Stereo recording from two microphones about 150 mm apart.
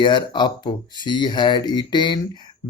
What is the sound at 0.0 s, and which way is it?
Speech, 30° left (ahead or behind).